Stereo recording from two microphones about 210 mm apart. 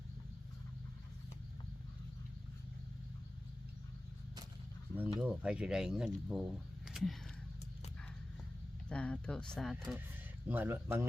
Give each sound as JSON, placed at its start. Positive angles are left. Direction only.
{"t": 4.9, "sound": "speech", "side_deg": -5}
{"t": 8.9, "sound": "speech", "side_deg": 5}
{"t": 10.5, "sound": "speech", "side_deg": -10}